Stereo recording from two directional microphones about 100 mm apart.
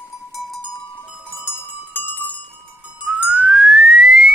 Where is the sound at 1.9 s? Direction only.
20° left (ahead or behind).